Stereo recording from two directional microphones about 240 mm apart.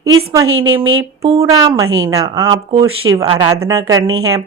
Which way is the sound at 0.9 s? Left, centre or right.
Right.